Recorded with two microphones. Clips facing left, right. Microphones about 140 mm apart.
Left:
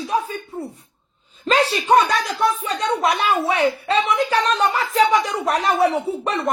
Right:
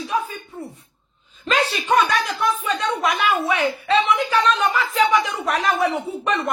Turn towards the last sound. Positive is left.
turn(degrees=35)  # may be behind; listen again after turning